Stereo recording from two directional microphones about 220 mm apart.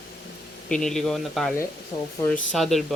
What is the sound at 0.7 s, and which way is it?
Speech, centre (ahead or behind).